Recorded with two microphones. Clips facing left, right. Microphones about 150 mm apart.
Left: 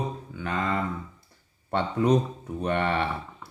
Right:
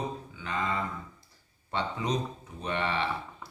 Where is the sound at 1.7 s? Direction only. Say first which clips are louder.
Left 8 dB; 55° left (ahead or behind).